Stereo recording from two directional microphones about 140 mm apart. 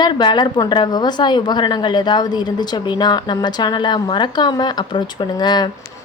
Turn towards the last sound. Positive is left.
turn(degrees=30)  # may be behind; listen again after turning